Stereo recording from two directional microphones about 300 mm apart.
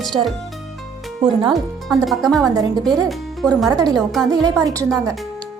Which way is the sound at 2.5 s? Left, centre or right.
Centre.